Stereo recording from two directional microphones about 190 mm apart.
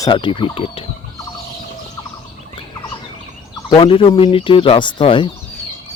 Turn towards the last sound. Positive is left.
turn(degrees=25)  # may be behind; listen again after turning